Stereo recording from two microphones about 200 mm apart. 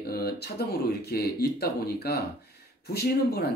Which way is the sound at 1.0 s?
50° left (ahead or behind).